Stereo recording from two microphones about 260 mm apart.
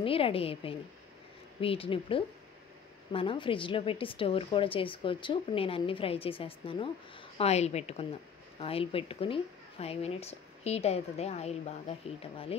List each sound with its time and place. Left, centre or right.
0.0 s a woman's voice: left